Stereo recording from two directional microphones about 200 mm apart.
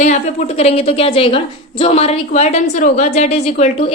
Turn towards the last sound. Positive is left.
turn(degrees=30)  # may be behind; listen again after turning